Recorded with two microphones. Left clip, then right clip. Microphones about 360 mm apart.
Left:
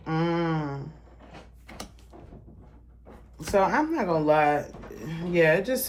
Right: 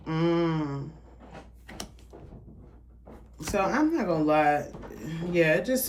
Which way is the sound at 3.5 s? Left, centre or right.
Centre.